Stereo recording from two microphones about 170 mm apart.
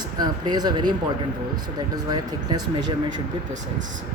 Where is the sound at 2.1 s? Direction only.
25° right (ahead or behind).